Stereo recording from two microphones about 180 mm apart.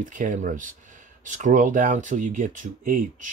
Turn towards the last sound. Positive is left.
turn(degrees=-45)  # may be behind; listen again after turning